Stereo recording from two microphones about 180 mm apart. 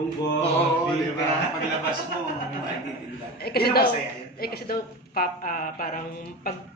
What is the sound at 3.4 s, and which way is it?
A man's voice, 60° left (ahead or behind).